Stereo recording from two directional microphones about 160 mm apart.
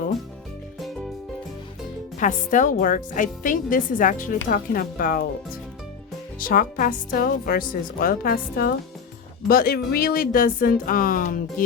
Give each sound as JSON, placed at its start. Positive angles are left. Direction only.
{"t": 2.1, "sound": "speech", "side_deg": 50}
{"t": 6.4, "sound": "speech", "side_deg": 60}